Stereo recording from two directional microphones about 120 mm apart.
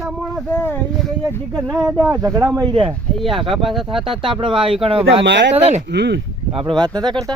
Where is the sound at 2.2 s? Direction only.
25° right (ahead or behind).